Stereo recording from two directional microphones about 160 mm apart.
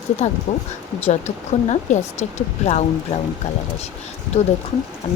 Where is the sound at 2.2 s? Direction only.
45° left (ahead or behind).